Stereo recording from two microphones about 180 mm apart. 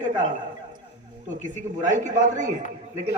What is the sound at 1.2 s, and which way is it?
A man's voice, 45° right (ahead or behind).